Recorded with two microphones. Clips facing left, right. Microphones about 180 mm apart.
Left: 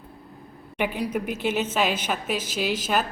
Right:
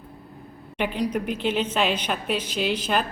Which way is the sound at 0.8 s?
10° left (ahead or behind).